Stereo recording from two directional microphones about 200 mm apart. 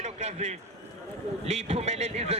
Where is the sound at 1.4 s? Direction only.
30° right (ahead or behind).